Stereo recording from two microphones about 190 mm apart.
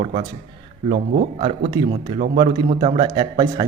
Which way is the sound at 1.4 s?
25° right (ahead or behind).